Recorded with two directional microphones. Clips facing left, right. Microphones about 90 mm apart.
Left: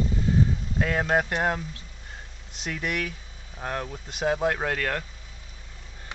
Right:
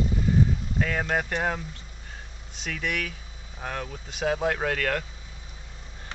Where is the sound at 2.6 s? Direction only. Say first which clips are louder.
Left 1 dB; 10° left (ahead or behind).